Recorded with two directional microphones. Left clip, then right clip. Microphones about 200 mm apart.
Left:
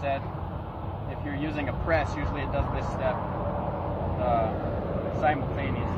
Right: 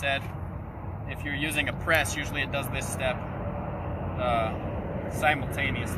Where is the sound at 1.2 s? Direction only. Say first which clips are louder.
Right 4 dB; 15° right (ahead or behind).